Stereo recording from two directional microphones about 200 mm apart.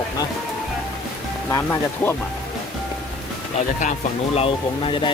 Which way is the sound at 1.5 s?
10° left (ahead or behind).